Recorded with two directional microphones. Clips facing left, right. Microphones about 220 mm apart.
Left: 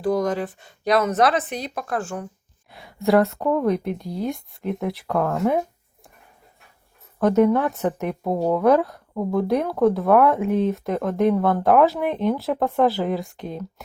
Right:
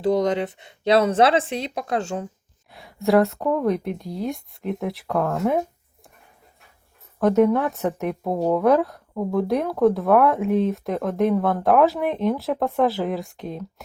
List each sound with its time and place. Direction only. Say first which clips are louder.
0.0 s speech: right 2 dB; 25° right (ahead or behind)
2.7 s speech: even; centre (ahead or behind)
7.2 s speech: even; centre (ahead or behind)